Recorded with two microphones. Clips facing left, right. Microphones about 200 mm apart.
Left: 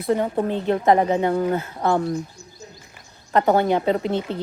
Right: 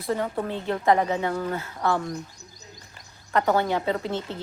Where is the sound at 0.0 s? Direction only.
25° left (ahead or behind).